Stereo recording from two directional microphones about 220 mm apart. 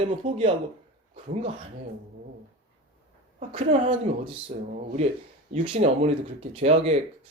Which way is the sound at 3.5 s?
20° right (ahead or behind).